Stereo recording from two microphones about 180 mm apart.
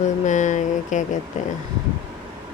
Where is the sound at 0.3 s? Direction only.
45° left (ahead or behind).